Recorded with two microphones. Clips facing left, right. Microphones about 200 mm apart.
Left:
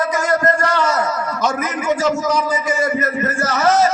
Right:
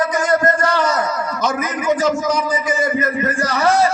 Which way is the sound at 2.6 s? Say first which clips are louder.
Even; 15° right (ahead or behind).